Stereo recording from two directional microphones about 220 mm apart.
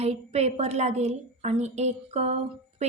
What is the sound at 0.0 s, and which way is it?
A woman's voice, 30° right (ahead or behind).